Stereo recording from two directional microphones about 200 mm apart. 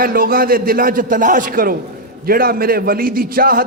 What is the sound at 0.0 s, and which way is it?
A man's voice, 45° right (ahead or behind).